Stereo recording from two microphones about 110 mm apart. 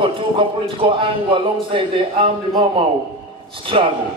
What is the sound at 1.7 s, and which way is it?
Speech, 50° right (ahead or behind).